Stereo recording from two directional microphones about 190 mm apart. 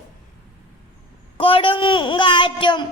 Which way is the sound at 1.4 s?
30° left (ahead or behind).